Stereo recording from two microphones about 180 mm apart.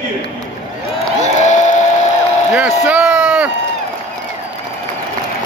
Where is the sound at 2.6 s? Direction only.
5° right (ahead or behind).